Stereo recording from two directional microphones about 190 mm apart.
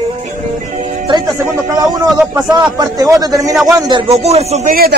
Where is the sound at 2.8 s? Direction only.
20° right (ahead or behind); by 4.7 s 35° right (ahead or behind).